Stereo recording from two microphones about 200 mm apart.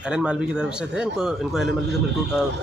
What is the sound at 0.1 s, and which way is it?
Speech, 5° right (ahead or behind).